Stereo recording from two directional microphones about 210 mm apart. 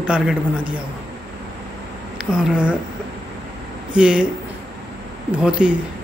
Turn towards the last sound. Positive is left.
turn(degrees=-5)  # may be behind; listen again after turning